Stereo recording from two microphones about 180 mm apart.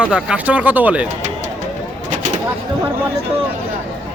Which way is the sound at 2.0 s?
45° right (ahead or behind).